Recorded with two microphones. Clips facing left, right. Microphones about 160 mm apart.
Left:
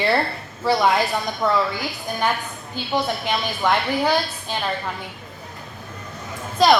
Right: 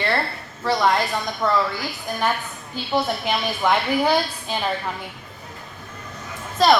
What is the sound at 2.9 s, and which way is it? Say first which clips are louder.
A woman's voice: right 1 dB; 5° right (ahead or behind).